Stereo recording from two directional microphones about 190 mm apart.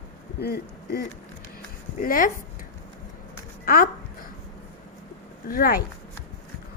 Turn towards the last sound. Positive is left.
turn(degrees=50)  # may be behind; listen again after turning